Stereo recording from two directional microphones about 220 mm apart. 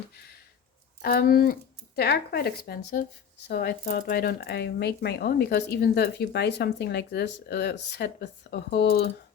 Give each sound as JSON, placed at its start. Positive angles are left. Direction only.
{"t": 1.0, "sound": "speech", "side_deg": 45}